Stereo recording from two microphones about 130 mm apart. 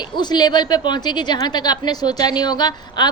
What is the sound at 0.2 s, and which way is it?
A woman's voice, 35° left (ahead or behind).